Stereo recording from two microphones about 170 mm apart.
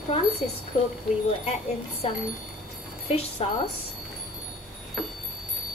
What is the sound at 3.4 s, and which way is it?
Speech, 35° left (ahead or behind).